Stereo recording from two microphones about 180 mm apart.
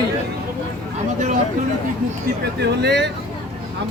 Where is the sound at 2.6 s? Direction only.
70° right (ahead or behind).